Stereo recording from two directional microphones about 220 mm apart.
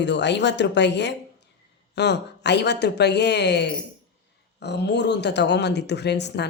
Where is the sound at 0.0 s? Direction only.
50° left (ahead or behind).